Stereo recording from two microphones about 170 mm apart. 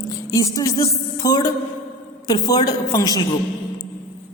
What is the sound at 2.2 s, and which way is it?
A woman's voice, 25° left (ahead or behind).